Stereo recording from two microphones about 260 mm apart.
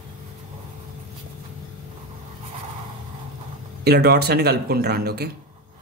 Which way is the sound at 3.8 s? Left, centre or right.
Right.